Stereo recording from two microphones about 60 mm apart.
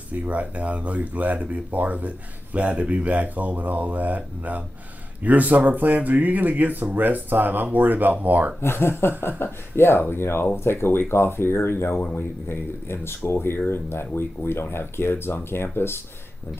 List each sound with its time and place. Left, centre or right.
0.1 s speech: right
8.5 s speech: left